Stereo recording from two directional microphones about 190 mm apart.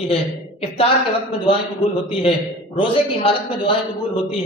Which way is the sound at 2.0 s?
30° left (ahead or behind).